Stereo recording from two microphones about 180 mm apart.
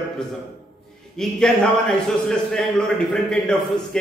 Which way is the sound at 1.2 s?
5° left (ahead or behind).